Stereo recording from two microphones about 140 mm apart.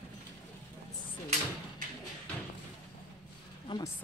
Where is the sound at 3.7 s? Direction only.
35° left (ahead or behind).